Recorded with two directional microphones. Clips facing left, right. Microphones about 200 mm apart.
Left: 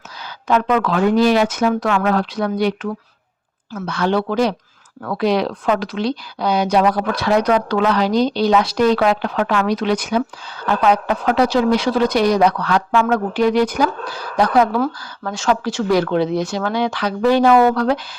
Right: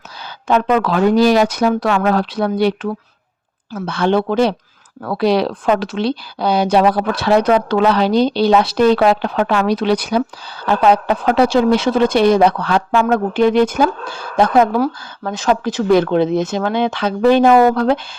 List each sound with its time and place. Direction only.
0.4 s speech: 30° right (ahead or behind)